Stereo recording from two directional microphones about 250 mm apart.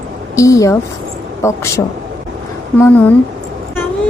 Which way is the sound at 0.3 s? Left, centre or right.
Centre.